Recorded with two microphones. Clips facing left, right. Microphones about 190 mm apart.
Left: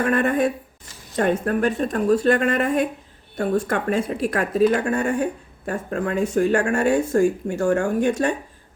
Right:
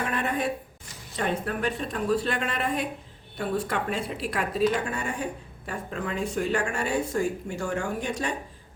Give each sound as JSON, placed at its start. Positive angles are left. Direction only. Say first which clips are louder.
{"t": 0.1, "sound": "speech", "louder": "left 8 dB", "side_deg": 50}